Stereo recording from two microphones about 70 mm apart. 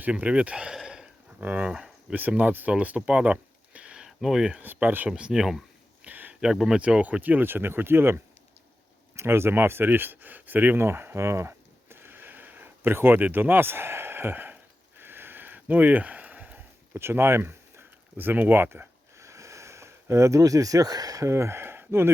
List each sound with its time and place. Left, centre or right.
0.0 s speech: centre
0.8 s a sound: centre
1.4 s speech: right
1.6 s speech: centre
2.4 s speech: right; by 4.6 s centre
4.6 s speech: right
5.0 s speech: centre
6.1 s a sound: right
6.4 s speech: centre
6.8 s speech: centre; by 8.2 s right
9.1 s a sound: right
16.9 s speech: right
19.2 s a sound: right